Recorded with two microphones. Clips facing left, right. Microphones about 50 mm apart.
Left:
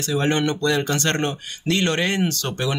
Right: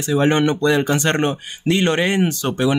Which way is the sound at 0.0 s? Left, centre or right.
Centre.